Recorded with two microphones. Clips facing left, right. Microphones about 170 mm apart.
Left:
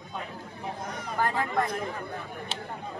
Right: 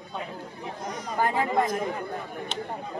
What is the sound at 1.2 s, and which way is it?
Chatter, 15° right (ahead or behind).